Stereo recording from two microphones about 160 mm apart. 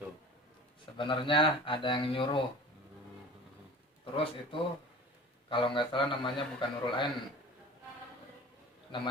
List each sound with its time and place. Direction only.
0.9 s a man's voice: 30° left (ahead or behind)
4.0 s a man's voice: 35° left (ahead or behind)
8.9 s a man's voice: 30° left (ahead or behind)